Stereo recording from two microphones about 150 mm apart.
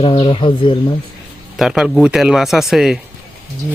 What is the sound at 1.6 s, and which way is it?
Speech, 5° right (ahead or behind).